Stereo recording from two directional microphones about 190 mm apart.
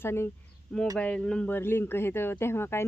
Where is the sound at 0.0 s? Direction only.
10° left (ahead or behind).